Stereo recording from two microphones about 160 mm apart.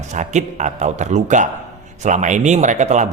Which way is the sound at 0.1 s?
50° right (ahead or behind).